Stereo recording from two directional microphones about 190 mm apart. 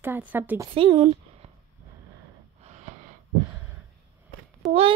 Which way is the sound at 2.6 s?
40° right (ahead or behind).